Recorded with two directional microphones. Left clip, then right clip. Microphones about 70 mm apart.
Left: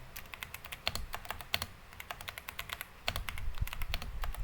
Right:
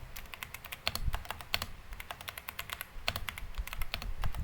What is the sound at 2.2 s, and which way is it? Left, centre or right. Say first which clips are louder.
Typing: right 1 dB; centre.